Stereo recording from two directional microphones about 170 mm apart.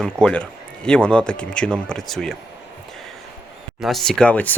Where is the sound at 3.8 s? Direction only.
Centre (ahead or behind).